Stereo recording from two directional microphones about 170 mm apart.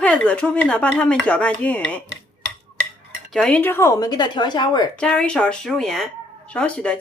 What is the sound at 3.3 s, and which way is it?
Speech, 5° left (ahead or behind).